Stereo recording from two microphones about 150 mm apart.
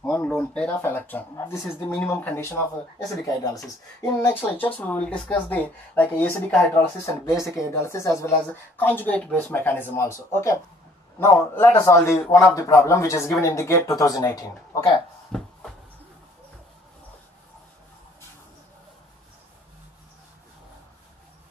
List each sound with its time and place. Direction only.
0.0 s speech: 5° left (ahead or behind)
7.2 s speech: 20° left (ahead or behind)
15.3 s a sound: 5° left (ahead or behind)